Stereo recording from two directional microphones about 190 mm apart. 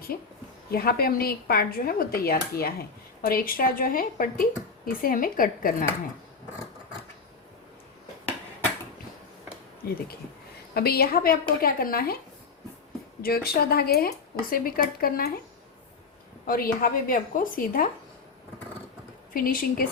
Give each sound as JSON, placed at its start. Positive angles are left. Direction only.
{"t": 0.1, "sound": "speech", "side_deg": 50}
{"t": 10.8, "sound": "speech", "side_deg": 55}
{"t": 13.2, "sound": "speech", "side_deg": 55}
{"t": 16.5, "sound": "speech", "side_deg": 50}
{"t": 19.3, "sound": "speech", "side_deg": 50}